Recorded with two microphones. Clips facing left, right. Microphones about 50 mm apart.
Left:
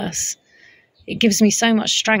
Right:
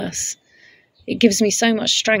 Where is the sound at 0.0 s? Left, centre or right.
Left.